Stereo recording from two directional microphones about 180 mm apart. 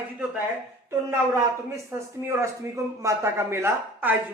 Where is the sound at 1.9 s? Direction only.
15° right (ahead or behind).